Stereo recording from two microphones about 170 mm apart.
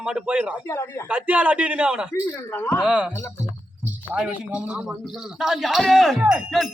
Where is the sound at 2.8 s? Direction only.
5° right (ahead or behind).